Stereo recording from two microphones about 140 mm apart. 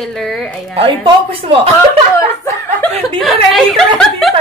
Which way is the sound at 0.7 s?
40° right (ahead or behind).